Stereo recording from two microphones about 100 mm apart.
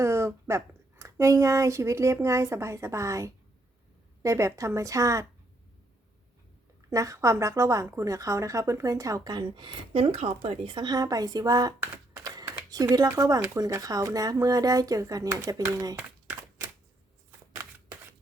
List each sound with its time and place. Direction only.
0.0 s a woman's voice: 30° right (ahead or behind)
6.9 s a woman's voice: 30° right (ahead or behind); by 10.8 s 70° right (ahead or behind)
10.8 s a woman's voice: 40° right (ahead or behind)
12.1 s a sound: 40° right (ahead or behind)
12.7 s a woman's voice: 40° right (ahead or behind)